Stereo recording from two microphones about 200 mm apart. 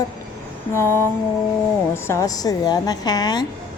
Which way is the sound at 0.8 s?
10° left (ahead or behind).